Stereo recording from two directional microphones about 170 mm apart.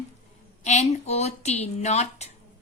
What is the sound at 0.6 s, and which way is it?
Speech, 40° left (ahead or behind).